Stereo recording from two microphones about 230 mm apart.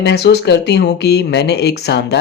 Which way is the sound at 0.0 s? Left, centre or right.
Left.